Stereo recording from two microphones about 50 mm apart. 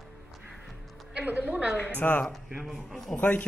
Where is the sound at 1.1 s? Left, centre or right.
Right.